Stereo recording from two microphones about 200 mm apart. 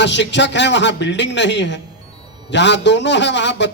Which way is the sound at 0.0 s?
60° left (ahead or behind).